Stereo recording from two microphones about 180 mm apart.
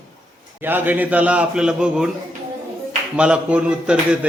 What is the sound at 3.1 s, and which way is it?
Speech, 5° right (ahead or behind).